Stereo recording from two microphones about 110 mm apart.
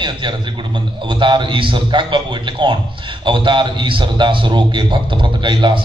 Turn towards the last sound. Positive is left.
turn(degrees=-45)  # may be behind; listen again after turning